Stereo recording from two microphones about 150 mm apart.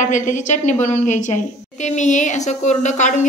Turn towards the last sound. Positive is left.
turn(degrees=55)  # may be behind; listen again after turning